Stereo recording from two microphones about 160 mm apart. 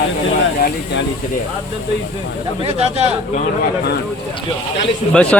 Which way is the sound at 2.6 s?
40° right (ahead or behind).